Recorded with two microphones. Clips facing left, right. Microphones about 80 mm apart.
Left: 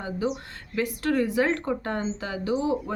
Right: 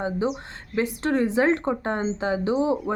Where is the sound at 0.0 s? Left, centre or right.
Right.